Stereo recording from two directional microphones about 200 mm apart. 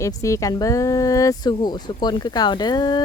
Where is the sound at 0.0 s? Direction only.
15° left (ahead or behind).